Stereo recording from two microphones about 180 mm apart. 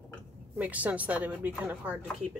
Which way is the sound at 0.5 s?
10° right (ahead or behind).